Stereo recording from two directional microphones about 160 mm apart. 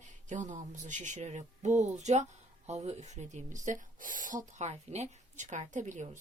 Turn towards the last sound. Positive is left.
turn(degrees=-50)  # may be behind; listen again after turning